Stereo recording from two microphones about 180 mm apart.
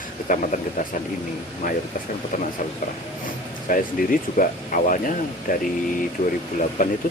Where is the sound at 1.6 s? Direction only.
50° left (ahead or behind).